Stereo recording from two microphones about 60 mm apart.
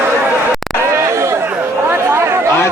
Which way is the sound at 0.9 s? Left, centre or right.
Right.